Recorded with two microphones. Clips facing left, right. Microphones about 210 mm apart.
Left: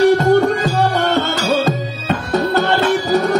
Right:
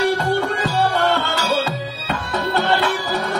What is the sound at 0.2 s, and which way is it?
Music, 45° left (ahead or behind).